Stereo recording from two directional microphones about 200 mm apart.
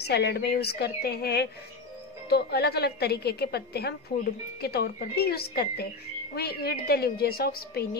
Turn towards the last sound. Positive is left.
turn(degrees=50)  # may be behind; listen again after turning